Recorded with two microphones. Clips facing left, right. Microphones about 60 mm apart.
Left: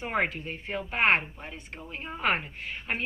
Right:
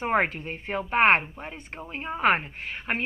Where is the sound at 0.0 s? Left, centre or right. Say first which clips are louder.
Right 4 dB; right.